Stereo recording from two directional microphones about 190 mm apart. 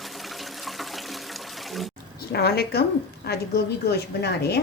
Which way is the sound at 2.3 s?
55° left (ahead or behind).